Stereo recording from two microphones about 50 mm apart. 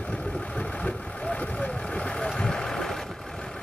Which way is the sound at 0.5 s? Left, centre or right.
Centre.